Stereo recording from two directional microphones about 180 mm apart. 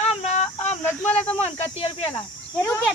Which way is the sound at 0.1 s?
40° left (ahead or behind).